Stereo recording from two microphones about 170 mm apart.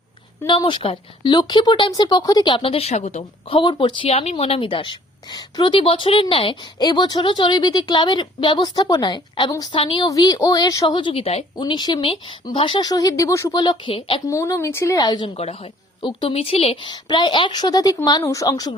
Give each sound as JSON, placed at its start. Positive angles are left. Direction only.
{"t": 0.4, "sound": "a woman's voice", "side_deg": 30}
{"t": 3.6, "sound": "a woman's voice", "side_deg": 30}
{"t": 11.5, "sound": "a woman's voice", "side_deg": 25}
{"t": 14.3, "sound": "a woman's voice", "side_deg": 20}
{"t": 15.4, "sound": "a woman's voice", "side_deg": 35}